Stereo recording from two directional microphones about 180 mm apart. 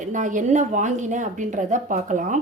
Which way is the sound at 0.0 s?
45° right (ahead or behind).